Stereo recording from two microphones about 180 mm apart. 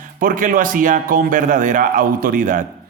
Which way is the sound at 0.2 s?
50° right (ahead or behind).